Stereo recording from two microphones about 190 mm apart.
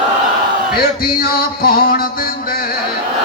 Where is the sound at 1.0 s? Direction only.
50° left (ahead or behind).